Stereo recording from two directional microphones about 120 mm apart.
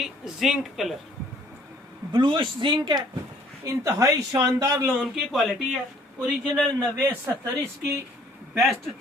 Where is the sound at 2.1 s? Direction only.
40° right (ahead or behind).